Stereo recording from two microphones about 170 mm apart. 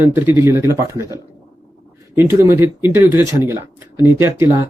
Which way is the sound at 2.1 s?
15° right (ahead or behind).